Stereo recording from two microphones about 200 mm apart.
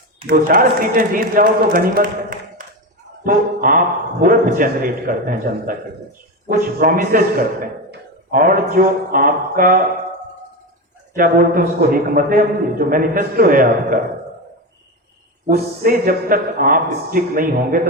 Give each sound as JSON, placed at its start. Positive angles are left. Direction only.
{"t": 0.3, "sound": "a man's voice", "side_deg": -45}
{"t": 11.1, "sound": "a man's voice", "side_deg": -45}
{"t": 15.4, "sound": "a man's voice", "side_deg": -45}